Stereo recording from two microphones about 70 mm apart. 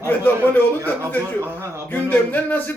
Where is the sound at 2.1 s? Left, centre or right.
Left.